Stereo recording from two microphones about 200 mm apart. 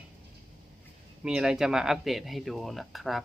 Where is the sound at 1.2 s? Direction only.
5° right (ahead or behind).